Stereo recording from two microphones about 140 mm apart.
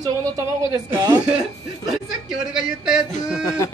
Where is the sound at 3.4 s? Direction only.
20° left (ahead or behind).